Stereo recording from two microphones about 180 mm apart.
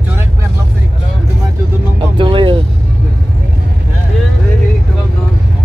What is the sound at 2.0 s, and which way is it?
Vehicle, 25° right (ahead or behind).